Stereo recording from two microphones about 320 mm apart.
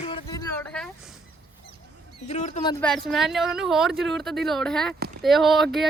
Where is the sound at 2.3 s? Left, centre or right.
Left.